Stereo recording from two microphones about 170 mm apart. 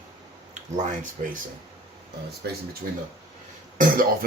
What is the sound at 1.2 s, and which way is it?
Speech, 50° right (ahead or behind).